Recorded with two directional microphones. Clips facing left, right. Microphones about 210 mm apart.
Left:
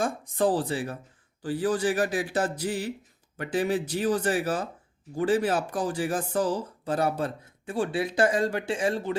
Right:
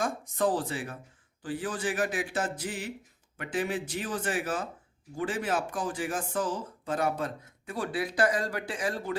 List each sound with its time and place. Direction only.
0.0 s speech: 35° left (ahead or behind)